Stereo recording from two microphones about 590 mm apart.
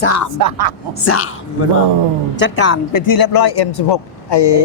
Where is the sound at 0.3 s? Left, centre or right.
Right.